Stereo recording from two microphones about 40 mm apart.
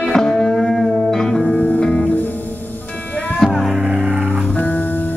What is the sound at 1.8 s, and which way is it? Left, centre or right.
Music, left.